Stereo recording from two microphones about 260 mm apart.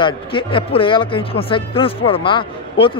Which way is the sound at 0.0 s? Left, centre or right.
Centre.